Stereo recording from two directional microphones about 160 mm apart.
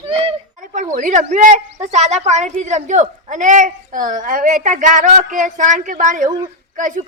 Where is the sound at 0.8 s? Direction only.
50° right (ahead or behind).